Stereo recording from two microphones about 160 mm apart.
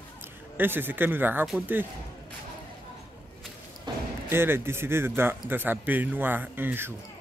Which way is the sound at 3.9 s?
25° right (ahead or behind).